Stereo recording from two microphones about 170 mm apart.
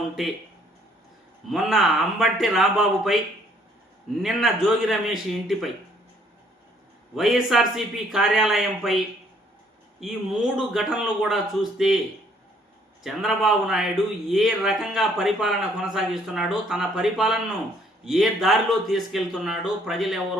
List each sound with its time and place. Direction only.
1.5 s a man's voice: centre (ahead or behind)
4.2 s a man's voice: centre (ahead or behind)
7.2 s a man's voice: centre (ahead or behind)
10.0 s a man's voice: centre (ahead or behind)
13.0 s a man's voice: centre (ahead or behind)